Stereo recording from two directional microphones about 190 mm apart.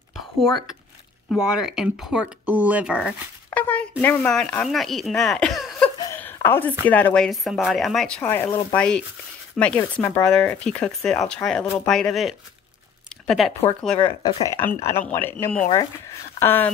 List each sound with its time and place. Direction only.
0.4 s speech: centre (ahead or behind)
3.4 s a sound: 10° left (ahead or behind)
4.0 s speech: 10° left (ahead or behind)
5.9 s a sound: 15° left (ahead or behind)
6.9 s speech: 10° left (ahead or behind)
13.9 s speech: 20° left (ahead or behind)